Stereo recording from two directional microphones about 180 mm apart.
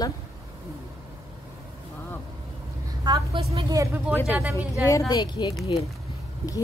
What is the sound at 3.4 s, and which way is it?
Speech, 25° right (ahead or behind).